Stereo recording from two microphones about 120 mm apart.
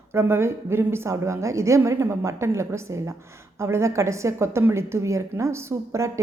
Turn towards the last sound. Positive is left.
turn(degrees=-25)  # may be behind; listen again after turning